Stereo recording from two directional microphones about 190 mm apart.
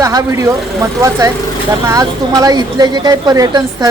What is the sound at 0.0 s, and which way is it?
A woman's voice, 15° right (ahead or behind).